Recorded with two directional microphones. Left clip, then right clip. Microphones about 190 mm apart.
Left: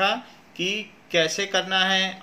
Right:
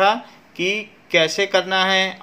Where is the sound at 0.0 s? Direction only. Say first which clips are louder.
Right 6 dB; 50° right (ahead or behind).